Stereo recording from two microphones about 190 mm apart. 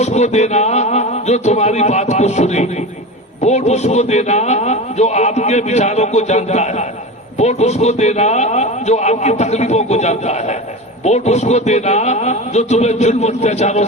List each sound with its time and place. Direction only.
0.0 s a man's voice: 35° left (ahead or behind)